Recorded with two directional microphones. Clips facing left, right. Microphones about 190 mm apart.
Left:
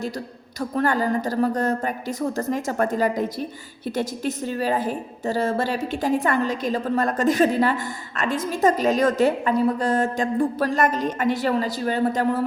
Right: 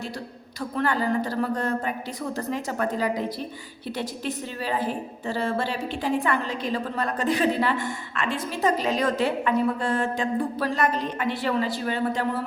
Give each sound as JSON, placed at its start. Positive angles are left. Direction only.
{"t": 0.8, "sound": "a woman's voice", "side_deg": 45}